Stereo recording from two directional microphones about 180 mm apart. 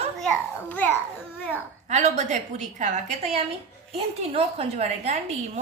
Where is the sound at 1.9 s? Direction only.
40° right (ahead or behind).